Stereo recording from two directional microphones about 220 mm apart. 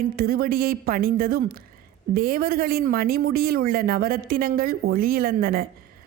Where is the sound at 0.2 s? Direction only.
40° right (ahead or behind).